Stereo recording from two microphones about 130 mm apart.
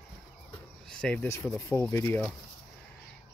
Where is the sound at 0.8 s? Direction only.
5° left (ahead or behind).